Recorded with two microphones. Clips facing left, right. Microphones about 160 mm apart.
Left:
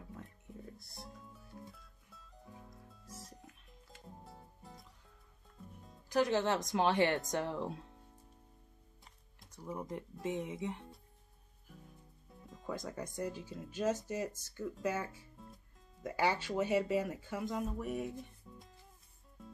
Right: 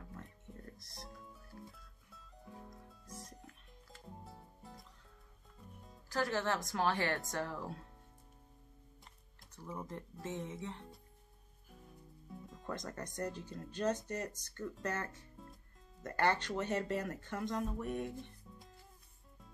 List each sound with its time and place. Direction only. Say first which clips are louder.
0.2 s music: left 2 dB; 5° left (ahead or behind)
6.0 s speech: left 4 dB; 20° left (ahead or behind)
9.6 s speech: left 3 dB; 10° left (ahead or behind)
12.4 s speech: left 2 dB; centre (ahead or behind)
18.4 s music: left 1 dB; 5° left (ahead or behind)